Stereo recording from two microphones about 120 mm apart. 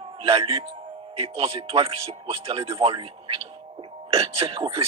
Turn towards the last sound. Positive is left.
turn(degrees=-50)  # may be behind; listen again after turning